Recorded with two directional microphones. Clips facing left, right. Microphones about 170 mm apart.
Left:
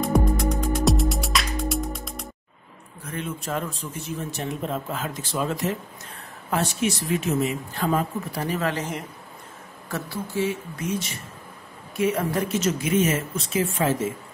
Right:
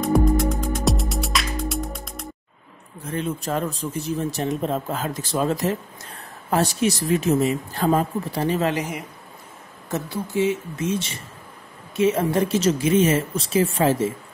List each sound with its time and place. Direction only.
0.0 s music: centre (ahead or behind)
3.0 s speech: 30° right (ahead or behind)
8.7 s a woman's voice: 10° right (ahead or behind)
9.8 s speech: 20° right (ahead or behind)